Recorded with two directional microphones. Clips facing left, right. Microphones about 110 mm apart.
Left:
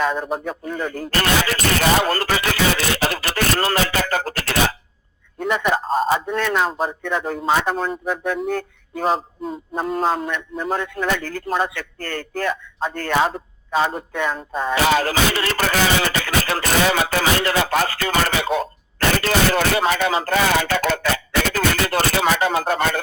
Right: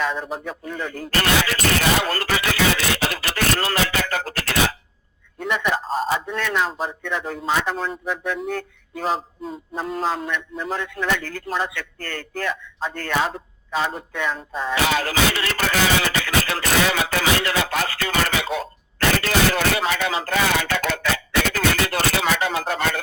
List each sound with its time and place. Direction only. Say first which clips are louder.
0.0 s a man's voice: left 4 dB; 50° left (ahead or behind)
13.7 s music: left 4 dB; 30° left (ahead or behind)
14.1 s a man's voice: left 3 dB; 45° left (ahead or behind)
14.8 s music: left 4 dB; 35° left (ahead or behind)